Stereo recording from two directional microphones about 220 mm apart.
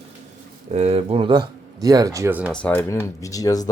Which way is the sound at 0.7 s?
30° right (ahead or behind).